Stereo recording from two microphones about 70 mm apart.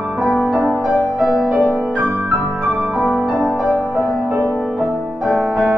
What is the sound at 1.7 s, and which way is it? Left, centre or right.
Music, right.